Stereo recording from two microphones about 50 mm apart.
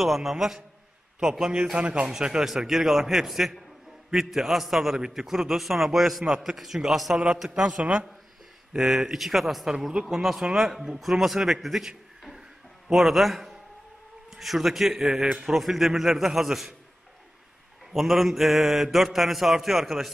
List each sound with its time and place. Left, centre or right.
0.0 s a man's voice: centre; by 2.0 s right
2.0 s a man's voice: centre
12.2 s a sound: centre
14.3 s speech: centre
17.9 s speech: centre